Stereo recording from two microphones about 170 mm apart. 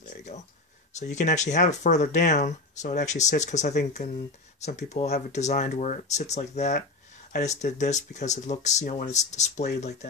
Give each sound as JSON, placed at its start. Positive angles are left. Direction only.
{"t": 0.0, "sound": "a sound", "side_deg": 45}
{"t": 1.1, "sound": "speech", "side_deg": 45}
{"t": 4.6, "sound": "speech", "side_deg": 40}